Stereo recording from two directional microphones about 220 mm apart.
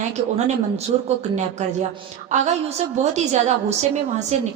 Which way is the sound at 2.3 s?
30° right (ahead or behind).